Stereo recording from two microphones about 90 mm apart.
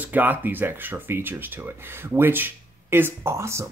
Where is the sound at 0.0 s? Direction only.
20° right (ahead or behind).